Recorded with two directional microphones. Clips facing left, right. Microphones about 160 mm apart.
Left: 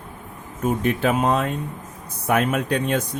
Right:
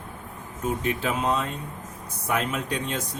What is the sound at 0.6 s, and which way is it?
Speech, 55° left (ahead or behind).